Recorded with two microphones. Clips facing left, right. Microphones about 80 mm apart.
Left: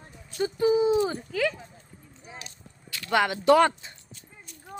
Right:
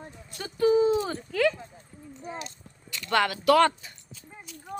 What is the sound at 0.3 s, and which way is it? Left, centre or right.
Speech, centre.